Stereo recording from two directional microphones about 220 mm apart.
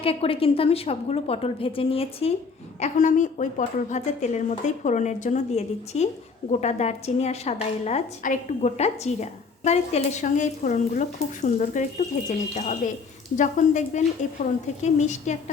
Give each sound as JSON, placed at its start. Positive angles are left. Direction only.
{"t": 0.0, "sound": "a woman's voice", "side_deg": 25}